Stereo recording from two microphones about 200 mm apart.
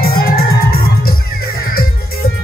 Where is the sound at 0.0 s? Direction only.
50° left (ahead or behind).